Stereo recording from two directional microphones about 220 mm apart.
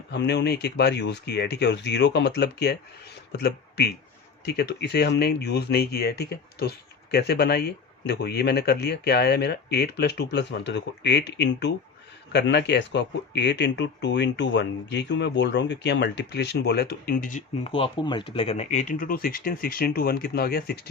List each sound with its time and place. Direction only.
0.1 s speech: 50° left (ahead or behind)